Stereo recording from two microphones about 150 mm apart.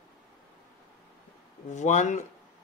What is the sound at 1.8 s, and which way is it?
Speech, 55° left (ahead or behind).